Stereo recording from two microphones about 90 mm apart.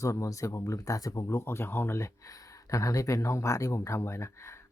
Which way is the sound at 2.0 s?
35° left (ahead or behind).